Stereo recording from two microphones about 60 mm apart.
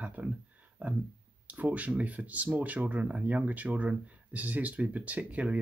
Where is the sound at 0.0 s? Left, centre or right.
Right.